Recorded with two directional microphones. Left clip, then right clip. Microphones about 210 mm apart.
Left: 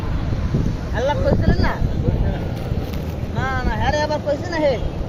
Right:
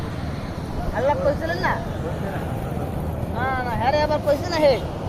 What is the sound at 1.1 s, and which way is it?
Vehicle, centre (ahead or behind).